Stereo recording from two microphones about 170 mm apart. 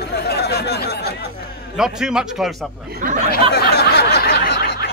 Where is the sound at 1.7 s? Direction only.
5° right (ahead or behind).